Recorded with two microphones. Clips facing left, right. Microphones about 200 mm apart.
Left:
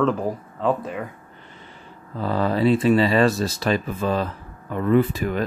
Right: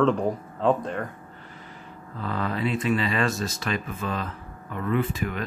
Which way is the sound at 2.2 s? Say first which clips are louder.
Left 7 dB; 35° left (ahead or behind).